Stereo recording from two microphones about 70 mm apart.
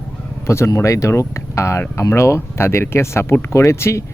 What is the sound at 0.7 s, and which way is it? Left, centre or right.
Speech, left.